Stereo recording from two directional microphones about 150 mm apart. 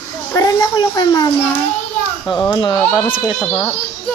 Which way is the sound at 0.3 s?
20° left (ahead or behind).